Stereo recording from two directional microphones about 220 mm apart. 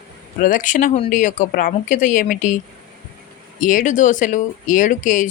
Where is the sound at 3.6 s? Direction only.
35° left (ahead or behind).